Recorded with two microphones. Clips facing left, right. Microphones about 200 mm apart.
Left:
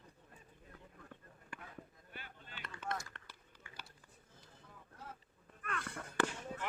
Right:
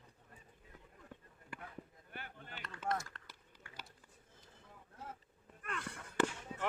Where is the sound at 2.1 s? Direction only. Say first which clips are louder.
Right 4 dB; 50° right (ahead or behind).